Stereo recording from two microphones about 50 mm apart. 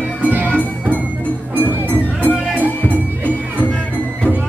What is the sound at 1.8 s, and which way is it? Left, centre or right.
Music, left.